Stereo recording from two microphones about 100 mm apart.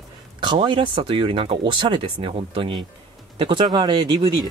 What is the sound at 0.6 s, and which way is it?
A man's voice, 65° right (ahead or behind).